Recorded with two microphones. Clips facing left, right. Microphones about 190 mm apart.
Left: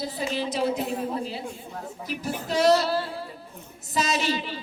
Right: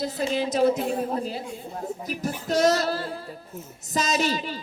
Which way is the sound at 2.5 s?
45° right (ahead or behind).